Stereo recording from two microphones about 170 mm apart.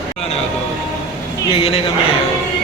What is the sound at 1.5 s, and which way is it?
Speech, 30° left (ahead or behind).